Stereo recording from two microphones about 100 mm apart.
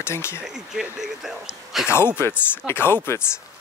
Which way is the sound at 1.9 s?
25° left (ahead or behind).